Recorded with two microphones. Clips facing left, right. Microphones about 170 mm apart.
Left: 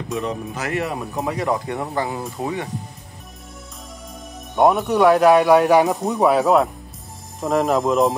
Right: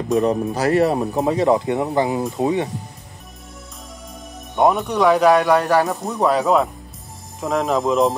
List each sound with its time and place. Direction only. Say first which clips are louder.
0.2 s speech: right 8 dB; 40° right (ahead or behind)
1.2 s speech: right 5 dB; 25° right (ahead or behind)
4.6 s speech: left 1 dB; centre (ahead or behind)
5.7 s speech: left 2 dB; 15° left (ahead or behind)
6.1 s speech: left 1 dB; centre (ahead or behind)